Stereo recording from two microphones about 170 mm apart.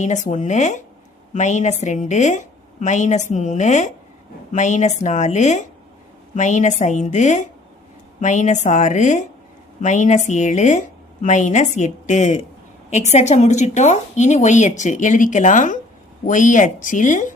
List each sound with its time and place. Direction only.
0.0 s a woman's voice: 45° left (ahead or behind)